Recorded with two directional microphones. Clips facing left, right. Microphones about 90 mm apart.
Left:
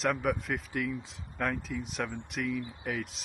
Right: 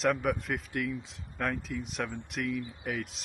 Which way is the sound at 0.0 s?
Centre (ahead or behind).